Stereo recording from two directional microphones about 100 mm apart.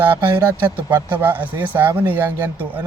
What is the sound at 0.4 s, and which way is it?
Speech, 20° right (ahead or behind).